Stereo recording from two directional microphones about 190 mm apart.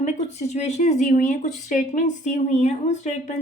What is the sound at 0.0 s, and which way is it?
A woman's voice, 35° left (ahead or behind).